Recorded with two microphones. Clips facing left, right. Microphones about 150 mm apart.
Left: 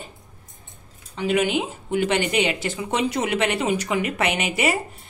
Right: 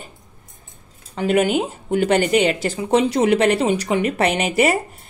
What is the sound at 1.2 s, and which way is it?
Speech, 45° right (ahead or behind).